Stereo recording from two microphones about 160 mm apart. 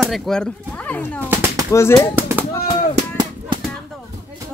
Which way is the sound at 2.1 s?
15° right (ahead or behind).